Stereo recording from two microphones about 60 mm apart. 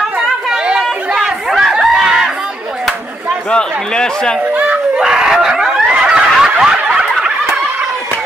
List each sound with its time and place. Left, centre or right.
0.0 s chatter: centre
1.2 s crowd: centre
3.4 s a man's voice: centre
4.6 s a sound: right
5.0 s a sound: centre
5.9 s fowl: centre